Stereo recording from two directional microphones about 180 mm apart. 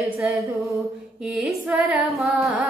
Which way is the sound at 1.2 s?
Centre (ahead or behind).